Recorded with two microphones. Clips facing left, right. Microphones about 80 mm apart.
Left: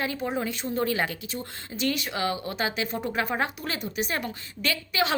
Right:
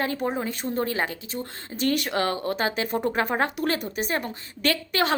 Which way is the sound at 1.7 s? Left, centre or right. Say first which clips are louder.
Right 4 dB; right.